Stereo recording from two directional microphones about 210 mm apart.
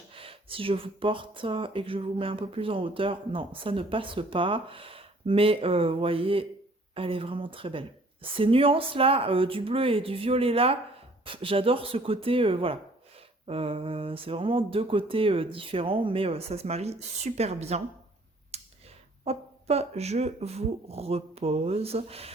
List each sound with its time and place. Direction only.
0.1 s speech: 25° right (ahead or behind)
18.5 s a sound: 30° right (ahead or behind)
19.2 s speech: 30° right (ahead or behind)